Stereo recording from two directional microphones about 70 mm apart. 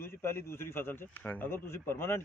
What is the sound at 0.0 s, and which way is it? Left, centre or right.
A man's voice, left.